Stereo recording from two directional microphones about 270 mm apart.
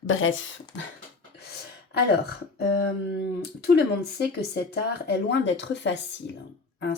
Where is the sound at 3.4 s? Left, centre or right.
Left.